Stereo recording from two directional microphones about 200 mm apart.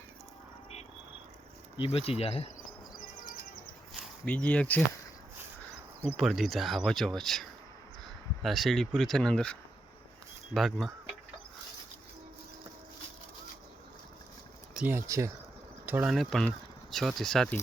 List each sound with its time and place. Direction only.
1.7 s speech: 25° left (ahead or behind)
4.3 s speech: 5° left (ahead or behind)
6.1 s speech: centre (ahead or behind)
14.7 s speech: 5° right (ahead or behind)